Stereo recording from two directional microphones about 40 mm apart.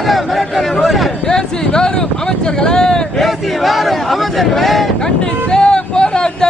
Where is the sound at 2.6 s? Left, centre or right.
Centre.